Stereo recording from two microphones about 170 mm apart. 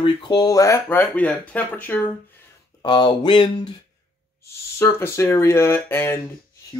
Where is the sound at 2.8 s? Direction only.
25° left (ahead or behind).